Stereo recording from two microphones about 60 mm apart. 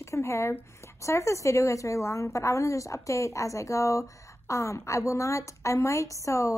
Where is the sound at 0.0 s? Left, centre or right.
Left.